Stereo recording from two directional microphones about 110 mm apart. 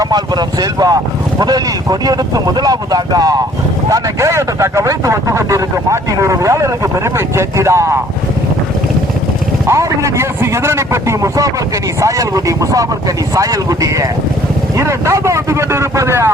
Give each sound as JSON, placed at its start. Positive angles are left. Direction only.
{"t": 0.0, "sound": "speech", "side_deg": -35}
{"t": 9.6, "sound": "speech", "side_deg": -25}